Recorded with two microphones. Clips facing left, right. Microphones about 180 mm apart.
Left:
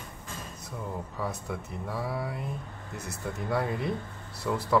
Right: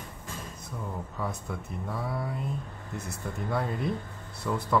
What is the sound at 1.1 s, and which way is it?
Speech, 5° left (ahead or behind).